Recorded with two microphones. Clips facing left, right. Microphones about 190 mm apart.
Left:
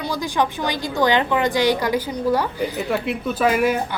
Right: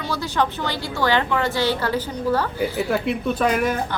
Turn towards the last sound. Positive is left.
turn(degrees=5)  # may be behind; listen again after turning